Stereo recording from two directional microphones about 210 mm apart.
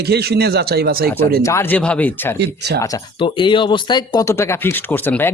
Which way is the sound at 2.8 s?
20° left (ahead or behind).